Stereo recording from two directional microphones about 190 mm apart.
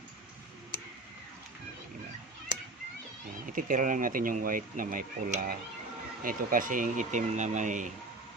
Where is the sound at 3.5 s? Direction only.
45° right (ahead or behind).